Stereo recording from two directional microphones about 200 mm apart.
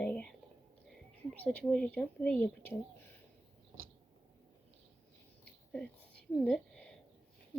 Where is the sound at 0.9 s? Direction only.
5° left (ahead or behind).